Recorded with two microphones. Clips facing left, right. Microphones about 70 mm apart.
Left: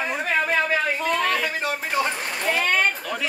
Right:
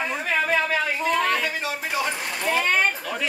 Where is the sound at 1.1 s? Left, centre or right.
Centre.